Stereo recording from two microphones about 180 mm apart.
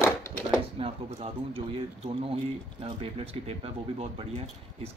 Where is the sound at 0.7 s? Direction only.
30° right (ahead or behind).